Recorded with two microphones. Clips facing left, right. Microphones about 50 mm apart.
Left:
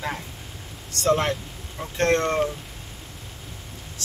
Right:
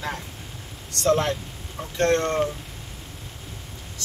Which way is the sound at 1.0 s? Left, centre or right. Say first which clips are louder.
Even; left.